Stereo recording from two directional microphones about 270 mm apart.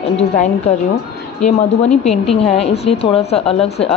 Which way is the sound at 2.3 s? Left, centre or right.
Left.